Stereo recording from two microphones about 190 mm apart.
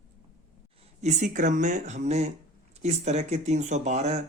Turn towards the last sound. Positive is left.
turn(degrees=-35)  # may be behind; listen again after turning